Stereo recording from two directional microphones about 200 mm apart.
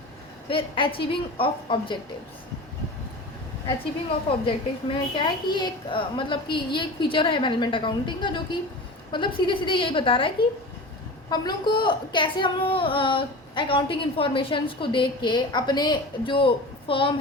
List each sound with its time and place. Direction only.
0.4 s a woman's voice: 25° left (ahead or behind)
4.3 s a woman's voice: 25° left (ahead or behind)